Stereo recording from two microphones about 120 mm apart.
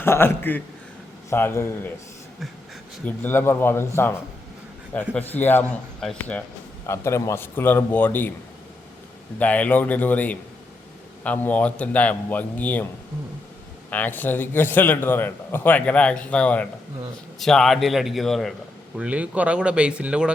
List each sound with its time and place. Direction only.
0.0 s speech: 20° left (ahead or behind)
3.0 s a man's voice: 15° left (ahead or behind)
6.8 s a man's voice: 25° left (ahead or behind)
9.4 s a man's voice: 10° left (ahead or behind)
13.9 s a man's voice: 15° left (ahead or behind)
18.9 s speech: 10° right (ahead or behind)